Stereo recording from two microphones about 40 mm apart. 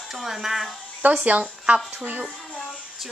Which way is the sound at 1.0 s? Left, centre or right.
Right.